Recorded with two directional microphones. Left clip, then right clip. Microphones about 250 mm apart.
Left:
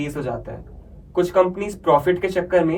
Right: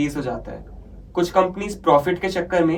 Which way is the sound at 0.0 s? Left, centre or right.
Centre.